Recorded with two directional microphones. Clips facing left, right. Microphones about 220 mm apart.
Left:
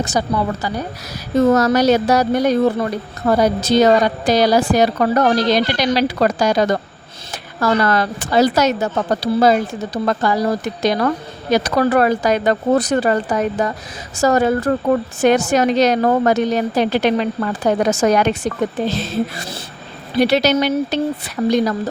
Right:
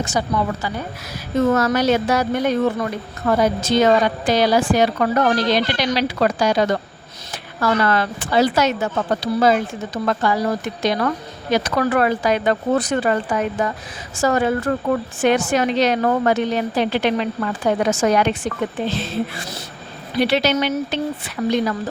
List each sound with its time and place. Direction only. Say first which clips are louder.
0.0 s speech: left 2 dB; 40° left (ahead or behind)